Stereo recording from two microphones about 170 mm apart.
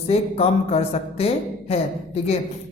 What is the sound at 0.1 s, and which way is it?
Speech, 35° left (ahead or behind).